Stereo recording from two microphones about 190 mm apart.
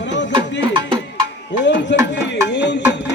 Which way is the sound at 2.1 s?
65° left (ahead or behind).